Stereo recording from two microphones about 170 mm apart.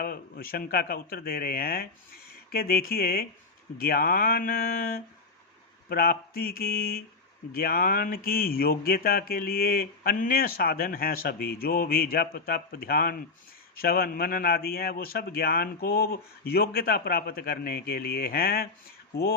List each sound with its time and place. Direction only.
0.0 s speech: 60° left (ahead or behind)